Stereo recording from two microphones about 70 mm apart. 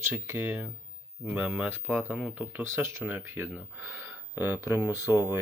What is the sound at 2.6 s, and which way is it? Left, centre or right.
Speech, right.